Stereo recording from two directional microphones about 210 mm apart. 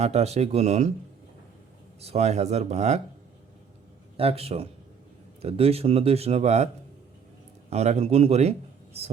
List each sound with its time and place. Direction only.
0.0 s speech: 30° right (ahead or behind)
2.0 s speech: 30° right (ahead or behind)
4.2 s speech: 30° right (ahead or behind)
7.7 s speech: 30° right (ahead or behind)